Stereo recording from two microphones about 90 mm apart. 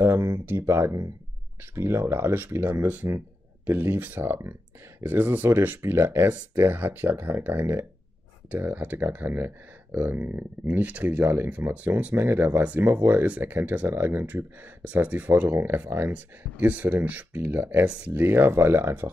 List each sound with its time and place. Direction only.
0.0 s speech: 35° right (ahead or behind)